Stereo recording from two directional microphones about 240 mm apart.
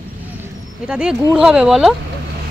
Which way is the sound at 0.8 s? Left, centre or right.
Centre.